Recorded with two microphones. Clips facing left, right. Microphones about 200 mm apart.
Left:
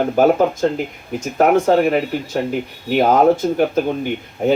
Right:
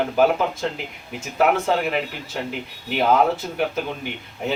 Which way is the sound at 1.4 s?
45° left (ahead or behind).